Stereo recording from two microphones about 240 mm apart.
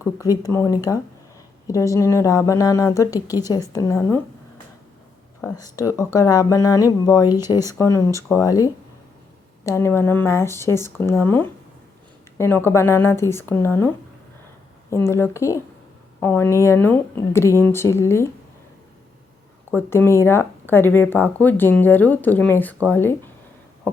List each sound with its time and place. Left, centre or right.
0.4 s speech: centre
5.4 s speech: centre
19.7 s speech: centre
23.9 s a sound: centre